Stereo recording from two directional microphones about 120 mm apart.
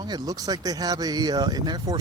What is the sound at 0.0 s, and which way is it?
Speech, 35° right (ahead or behind).